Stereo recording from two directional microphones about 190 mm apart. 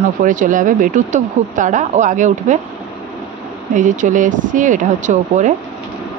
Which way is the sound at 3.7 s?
40° right (ahead or behind).